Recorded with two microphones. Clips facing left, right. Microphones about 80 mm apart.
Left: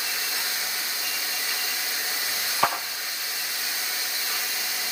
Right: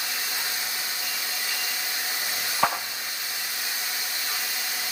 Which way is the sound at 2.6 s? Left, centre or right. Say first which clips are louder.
Even; centre.